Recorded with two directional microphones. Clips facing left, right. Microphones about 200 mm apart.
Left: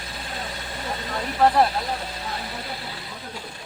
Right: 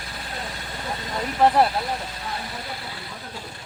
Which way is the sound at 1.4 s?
15° right (ahead or behind).